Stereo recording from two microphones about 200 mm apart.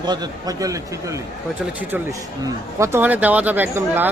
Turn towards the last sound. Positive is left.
turn(degrees=-10)  # may be behind; listen again after turning